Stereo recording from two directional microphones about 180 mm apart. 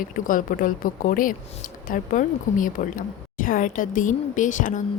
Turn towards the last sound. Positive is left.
turn(degrees=45)  # may be behind; listen again after turning